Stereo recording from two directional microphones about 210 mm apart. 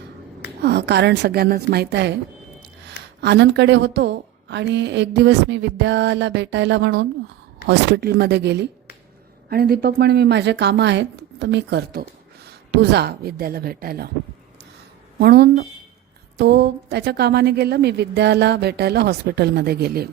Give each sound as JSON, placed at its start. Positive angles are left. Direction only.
{"t": 0.6, "sound": "a woman's voice", "side_deg": -55}
{"t": 15.2, "sound": "a woman's voice", "side_deg": -50}